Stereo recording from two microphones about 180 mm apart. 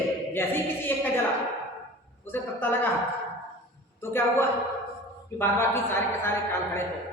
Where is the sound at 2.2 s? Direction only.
10° left (ahead or behind).